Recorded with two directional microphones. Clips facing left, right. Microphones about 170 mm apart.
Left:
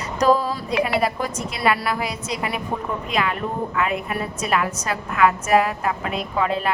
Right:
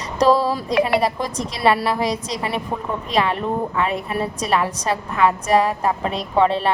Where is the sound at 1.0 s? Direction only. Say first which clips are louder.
Right 1 dB; 35° right (ahead or behind).